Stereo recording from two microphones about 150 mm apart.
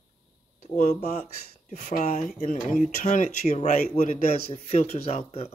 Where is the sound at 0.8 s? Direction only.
50° left (ahead or behind).